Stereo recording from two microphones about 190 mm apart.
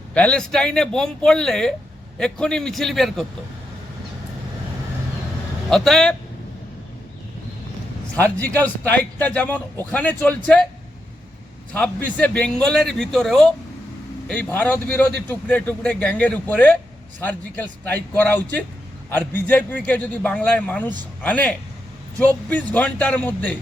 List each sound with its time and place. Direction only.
0.1 s a man's voice: 5° left (ahead or behind)
5.7 s a man's voice: centre (ahead or behind)
8.1 s a man's voice: 10° left (ahead or behind)
11.7 s a man's voice: 10° left (ahead or behind)